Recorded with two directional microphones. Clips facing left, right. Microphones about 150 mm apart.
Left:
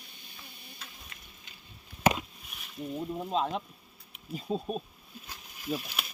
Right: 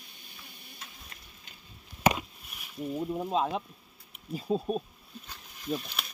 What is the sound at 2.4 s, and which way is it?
Speech, 5° right (ahead or behind).